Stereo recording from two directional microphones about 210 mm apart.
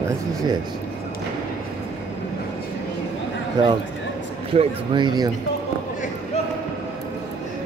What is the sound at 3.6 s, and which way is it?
Speech, 20° right (ahead or behind).